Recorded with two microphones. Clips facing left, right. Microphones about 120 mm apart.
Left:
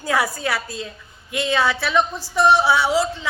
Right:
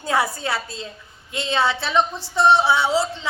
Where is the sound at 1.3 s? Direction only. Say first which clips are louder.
Left 1 dB; 25° right (ahead or behind).